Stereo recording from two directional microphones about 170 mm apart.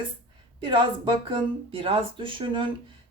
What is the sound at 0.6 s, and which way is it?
A woman's voice, 30° right (ahead or behind).